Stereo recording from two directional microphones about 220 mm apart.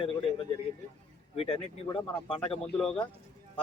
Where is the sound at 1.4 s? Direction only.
25° left (ahead or behind).